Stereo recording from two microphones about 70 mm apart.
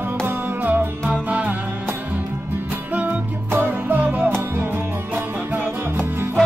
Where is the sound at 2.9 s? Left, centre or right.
Right.